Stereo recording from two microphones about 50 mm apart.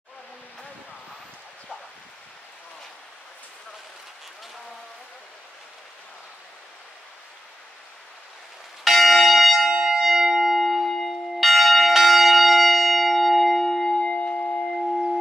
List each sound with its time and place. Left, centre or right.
8.8 s church bell: centre
13.9 s singing bowl: left